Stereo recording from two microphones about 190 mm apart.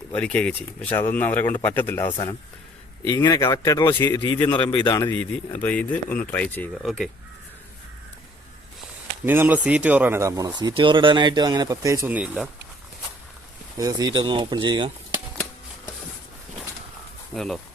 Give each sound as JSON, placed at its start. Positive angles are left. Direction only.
{"t": 0.2, "sound": "a man's voice", "side_deg": 5}
{"t": 5.5, "sound": "speech", "side_deg": 10}
{"t": 9.2, "sound": "speech", "side_deg": -10}
{"t": 13.7, "sound": "speech", "side_deg": -20}
{"t": 17.3, "sound": "speech", "side_deg": 0}